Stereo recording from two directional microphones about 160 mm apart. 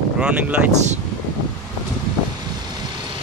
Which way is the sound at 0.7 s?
45° right (ahead or behind).